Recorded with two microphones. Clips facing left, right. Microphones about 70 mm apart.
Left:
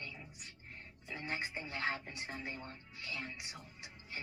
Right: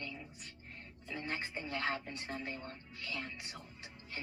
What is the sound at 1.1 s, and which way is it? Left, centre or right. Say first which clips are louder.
Speech: right 1 dB; centre.